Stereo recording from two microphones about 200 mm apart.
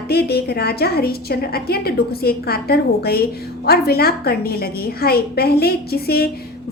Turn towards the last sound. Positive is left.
turn(degrees=50)  # may be behind; listen again after turning